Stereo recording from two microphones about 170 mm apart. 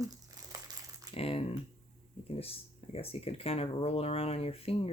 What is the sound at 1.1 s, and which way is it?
Speech, 35° left (ahead or behind).